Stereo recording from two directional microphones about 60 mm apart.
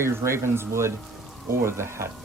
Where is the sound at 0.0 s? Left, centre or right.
Right.